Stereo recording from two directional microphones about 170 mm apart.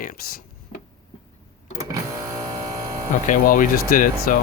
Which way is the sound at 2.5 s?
20° right (ahead or behind).